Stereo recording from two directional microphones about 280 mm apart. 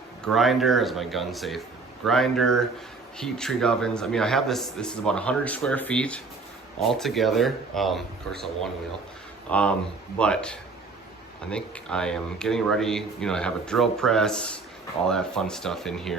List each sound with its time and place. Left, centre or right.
0.3 s a man's voice: centre
9.5 s a man's voice: centre